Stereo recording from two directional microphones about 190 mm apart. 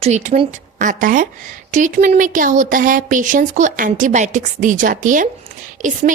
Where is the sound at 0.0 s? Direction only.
40° right (ahead or behind).